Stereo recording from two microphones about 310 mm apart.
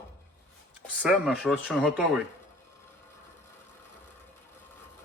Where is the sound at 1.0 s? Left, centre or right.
Centre.